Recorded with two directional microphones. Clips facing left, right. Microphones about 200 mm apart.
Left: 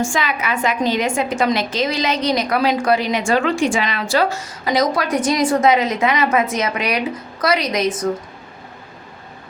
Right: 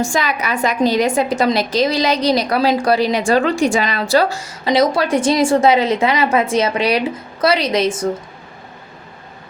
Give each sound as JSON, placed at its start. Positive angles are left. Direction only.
{"t": 0.0, "sound": "a woman's voice", "side_deg": -40}